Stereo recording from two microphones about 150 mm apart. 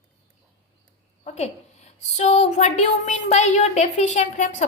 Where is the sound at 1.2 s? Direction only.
50° left (ahead or behind).